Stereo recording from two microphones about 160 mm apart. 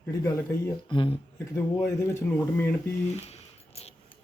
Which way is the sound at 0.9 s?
30° left (ahead or behind).